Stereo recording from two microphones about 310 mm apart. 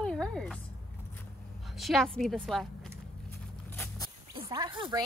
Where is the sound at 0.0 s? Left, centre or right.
Centre.